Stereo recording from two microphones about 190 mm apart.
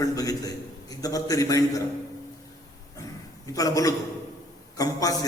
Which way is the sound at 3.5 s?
20° left (ahead or behind).